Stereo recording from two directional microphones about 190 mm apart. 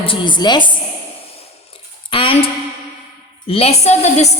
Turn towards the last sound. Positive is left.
turn(degrees=35)  # may be behind; listen again after turning